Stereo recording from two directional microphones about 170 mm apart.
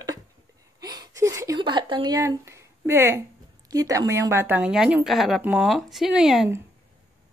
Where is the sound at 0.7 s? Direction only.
25° right (ahead or behind).